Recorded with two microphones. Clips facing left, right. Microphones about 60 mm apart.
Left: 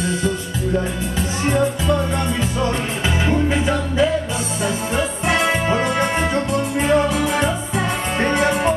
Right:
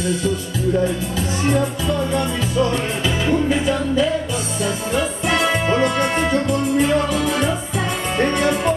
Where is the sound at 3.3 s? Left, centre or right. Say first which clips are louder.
Right 1 dB; left.